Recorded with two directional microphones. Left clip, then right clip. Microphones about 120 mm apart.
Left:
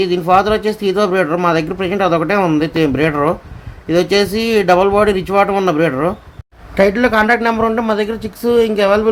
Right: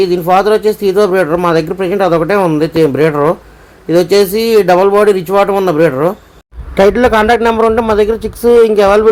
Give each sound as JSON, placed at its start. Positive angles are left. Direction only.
{"t": 0.0, "sound": "speech", "side_deg": -35}